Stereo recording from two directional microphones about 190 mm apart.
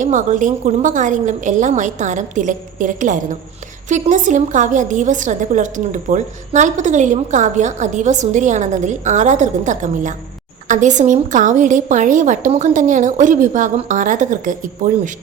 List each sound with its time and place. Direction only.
0.0 s a woman's voice: 40° right (ahead or behind)